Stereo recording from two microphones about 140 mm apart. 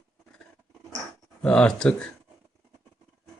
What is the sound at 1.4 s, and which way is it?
Speech, 5° left (ahead or behind).